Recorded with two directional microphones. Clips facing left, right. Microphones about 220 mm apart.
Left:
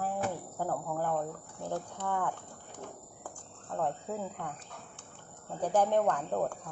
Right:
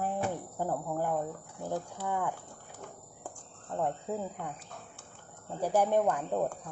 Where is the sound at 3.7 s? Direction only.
10° right (ahead or behind).